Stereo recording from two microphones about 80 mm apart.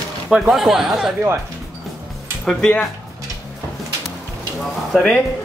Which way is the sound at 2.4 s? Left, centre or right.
Centre.